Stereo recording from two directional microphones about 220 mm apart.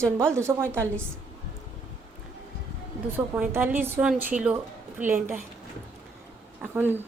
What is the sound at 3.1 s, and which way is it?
A woman's voice, 5° right (ahead or behind).